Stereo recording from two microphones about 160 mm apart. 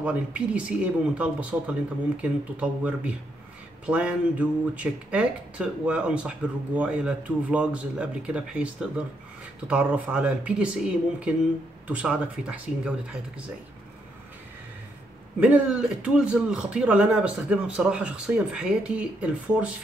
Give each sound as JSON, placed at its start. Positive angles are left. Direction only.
{"t": 0.0, "sound": "speech", "side_deg": -5}
{"t": 15.4, "sound": "speech", "side_deg": -5}